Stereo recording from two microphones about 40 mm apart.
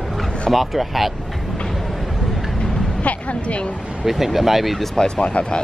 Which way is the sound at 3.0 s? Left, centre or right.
Left.